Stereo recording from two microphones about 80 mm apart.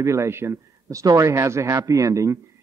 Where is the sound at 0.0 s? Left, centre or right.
Right.